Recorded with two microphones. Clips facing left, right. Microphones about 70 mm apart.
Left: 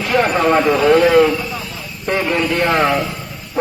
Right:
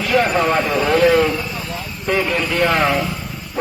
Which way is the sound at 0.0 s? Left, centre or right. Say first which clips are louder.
Left 1 dB; left.